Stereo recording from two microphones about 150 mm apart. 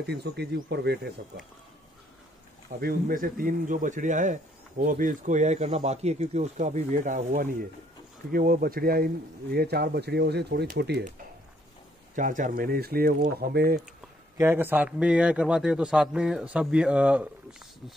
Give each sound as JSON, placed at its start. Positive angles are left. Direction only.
{"t": 0.0, "sound": "speech", "side_deg": -90}
{"t": 2.8, "sound": "a man's voice", "side_deg": -80}
{"t": 8.3, "sound": "speech", "side_deg": -75}
{"t": 12.2, "sound": "speech", "side_deg": -60}
{"t": 14.4, "sound": "a man's voice", "side_deg": -15}